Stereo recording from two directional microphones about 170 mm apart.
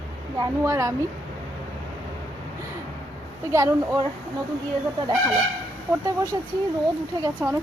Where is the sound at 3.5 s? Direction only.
20° right (ahead or behind).